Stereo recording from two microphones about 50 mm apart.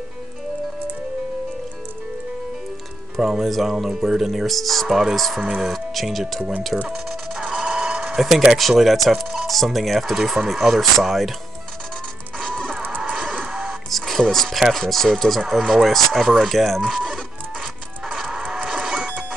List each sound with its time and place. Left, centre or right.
3.2 s speech: centre
6.9 s music: centre
7.5 s printer: centre
8.2 s speech: centre
12.4 s music: centre
12.8 s music: right
13.5 s music: centre
14.7 s speech: centre
17.1 s music: centre
18.7 s printer: centre